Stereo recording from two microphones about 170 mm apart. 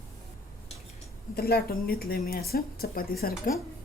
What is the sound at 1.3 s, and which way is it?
Speech, 65° left (ahead or behind).